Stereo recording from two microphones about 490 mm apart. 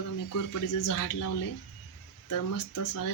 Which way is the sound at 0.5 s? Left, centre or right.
Left.